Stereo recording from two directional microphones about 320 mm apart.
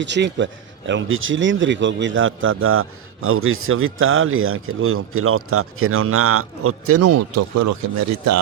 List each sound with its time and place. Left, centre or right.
0.0 s speech: right